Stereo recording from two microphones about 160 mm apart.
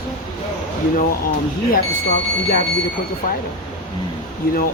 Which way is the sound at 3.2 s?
50° left (ahead or behind).